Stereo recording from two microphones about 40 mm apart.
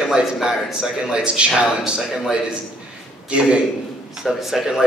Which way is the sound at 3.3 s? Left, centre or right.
Right.